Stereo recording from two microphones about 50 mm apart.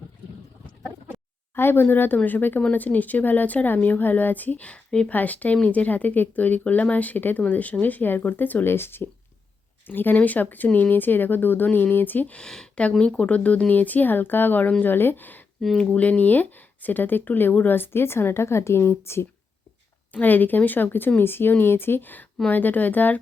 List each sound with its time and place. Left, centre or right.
1.5 s speech: left
12.3 s speech: centre; by 15.4 s left
15.8 s speech: left
20.2 s speech: left